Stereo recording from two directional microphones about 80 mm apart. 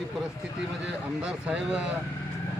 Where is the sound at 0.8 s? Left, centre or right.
Centre.